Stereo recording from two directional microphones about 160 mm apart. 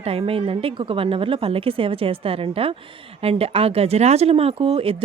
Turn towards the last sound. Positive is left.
turn(degrees=-35)  # may be behind; listen again after turning